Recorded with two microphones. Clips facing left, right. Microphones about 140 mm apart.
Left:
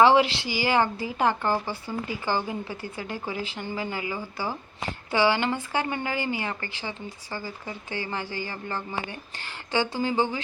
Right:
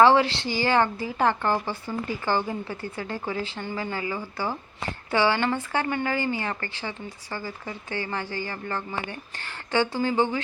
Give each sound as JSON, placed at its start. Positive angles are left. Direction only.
{"t": 0.0, "sound": "a woman's voice", "side_deg": 15}